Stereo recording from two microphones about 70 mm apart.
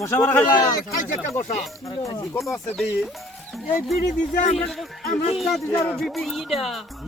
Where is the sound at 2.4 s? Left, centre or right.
Centre.